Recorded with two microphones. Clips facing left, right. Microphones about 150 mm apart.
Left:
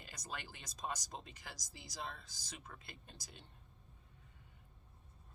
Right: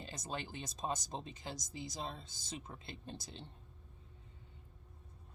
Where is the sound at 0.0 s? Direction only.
25° right (ahead or behind).